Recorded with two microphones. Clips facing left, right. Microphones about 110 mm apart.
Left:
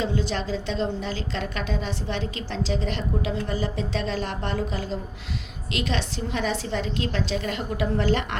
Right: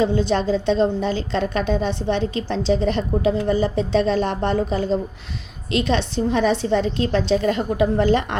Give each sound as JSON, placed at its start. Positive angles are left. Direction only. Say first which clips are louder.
{"t": 0.0, "sound": "a woman's voice", "louder": "right 8 dB", "side_deg": -25}